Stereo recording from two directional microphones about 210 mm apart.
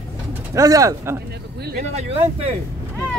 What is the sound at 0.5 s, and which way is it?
Speech, 15° right (ahead or behind).